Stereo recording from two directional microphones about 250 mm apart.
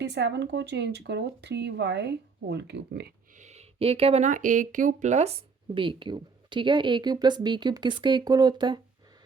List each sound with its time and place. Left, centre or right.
0.0 s speech: right
3.4 s speech: right